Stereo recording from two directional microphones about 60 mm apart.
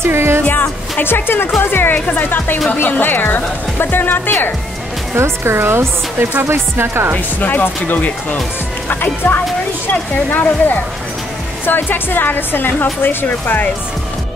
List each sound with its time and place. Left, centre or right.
0.0 s music: right
0.5 s a woman's voice: left
5.1 s speech: right
7.3 s a woman's voice: left